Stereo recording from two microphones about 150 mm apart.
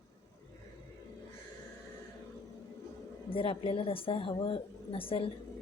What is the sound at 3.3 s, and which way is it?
A woman's voice, 35° left (ahead or behind).